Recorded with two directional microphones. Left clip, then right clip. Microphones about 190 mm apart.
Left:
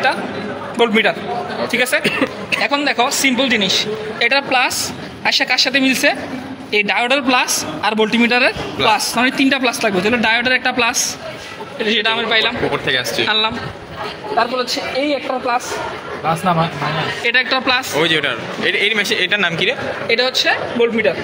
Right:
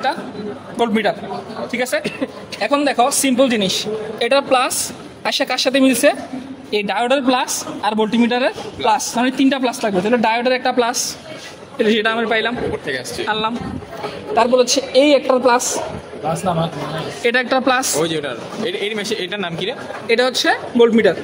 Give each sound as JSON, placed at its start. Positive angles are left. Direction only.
{"t": 0.7, "sound": "speech", "side_deg": -25}
{"t": 2.0, "sound": "a man's voice", "side_deg": 10}
{"t": 2.6, "sound": "a man's voice", "side_deg": -40}
{"t": 11.8, "sound": "speech", "side_deg": -50}
{"t": 12.8, "sound": "speech", "side_deg": 10}
{"t": 14.4, "sound": "a woman's voice", "side_deg": -65}
{"t": 17.2, "sound": "speech", "side_deg": -50}
{"t": 18.0, "sound": "a man's voice", "side_deg": -5}
{"t": 20.1, "sound": "speech", "side_deg": -50}